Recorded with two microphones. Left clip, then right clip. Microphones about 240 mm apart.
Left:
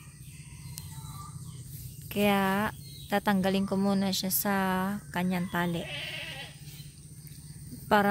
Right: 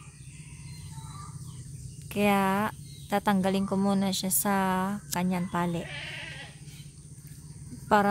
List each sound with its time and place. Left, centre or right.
2.0 s speech: centre
5.9 s bleat: left